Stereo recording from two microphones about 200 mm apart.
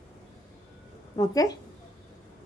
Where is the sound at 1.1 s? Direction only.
20° left (ahead or behind).